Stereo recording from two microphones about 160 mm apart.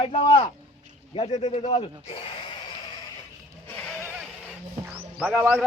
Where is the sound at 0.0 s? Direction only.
35° left (ahead or behind).